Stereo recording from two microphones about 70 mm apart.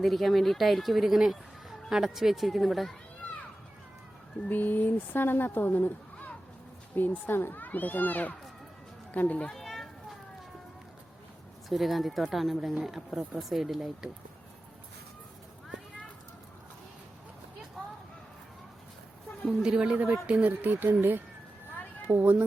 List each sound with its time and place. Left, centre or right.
0.0 s speech: centre
4.4 s speech: left
9.5 s a sound: centre
11.7 s speech: centre
19.5 s a woman's voice: centre; by 22.4 s right